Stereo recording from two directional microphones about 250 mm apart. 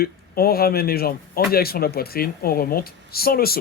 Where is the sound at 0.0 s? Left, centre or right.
Left.